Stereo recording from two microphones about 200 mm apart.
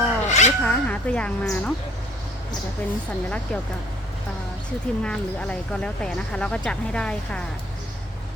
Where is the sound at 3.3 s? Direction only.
5° left (ahead or behind).